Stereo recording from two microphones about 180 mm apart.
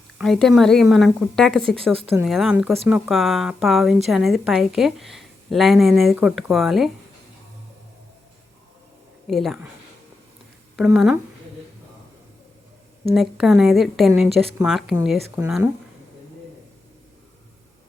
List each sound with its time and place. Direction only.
0.2 s a woman's voice: centre (ahead or behind)
9.2 s a woman's voice: centre (ahead or behind)
10.8 s a woman's voice: centre (ahead or behind)
13.1 s a woman's voice: 5° right (ahead or behind)